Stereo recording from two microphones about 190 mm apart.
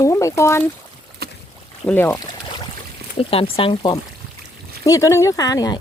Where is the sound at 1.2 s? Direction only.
55° right (ahead or behind).